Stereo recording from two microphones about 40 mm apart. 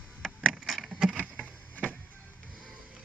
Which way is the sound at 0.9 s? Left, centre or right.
Centre.